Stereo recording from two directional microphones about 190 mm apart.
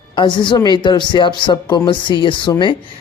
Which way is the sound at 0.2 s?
25° left (ahead or behind).